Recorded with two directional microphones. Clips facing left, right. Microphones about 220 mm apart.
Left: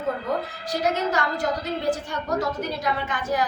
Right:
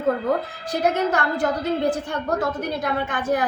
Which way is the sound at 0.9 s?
55° right (ahead or behind).